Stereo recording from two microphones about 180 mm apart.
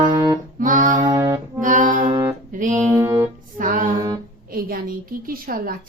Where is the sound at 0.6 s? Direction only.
45° right (ahead or behind).